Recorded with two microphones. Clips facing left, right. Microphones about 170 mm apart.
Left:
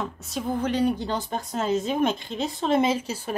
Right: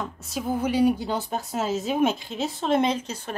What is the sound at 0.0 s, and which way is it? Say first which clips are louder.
A woman's voice: even; centre (ahead or behind).